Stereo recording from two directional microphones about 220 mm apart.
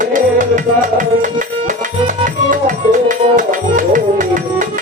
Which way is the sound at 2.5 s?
35° right (ahead or behind).